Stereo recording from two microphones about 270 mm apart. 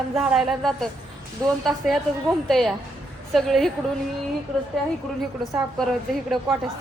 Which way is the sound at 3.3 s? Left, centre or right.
Centre.